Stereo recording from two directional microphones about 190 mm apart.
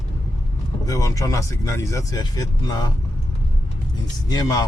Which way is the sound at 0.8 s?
15° left (ahead or behind).